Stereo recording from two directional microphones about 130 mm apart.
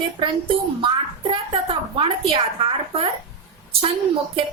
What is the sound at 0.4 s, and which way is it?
Speech, 40° right (ahead or behind).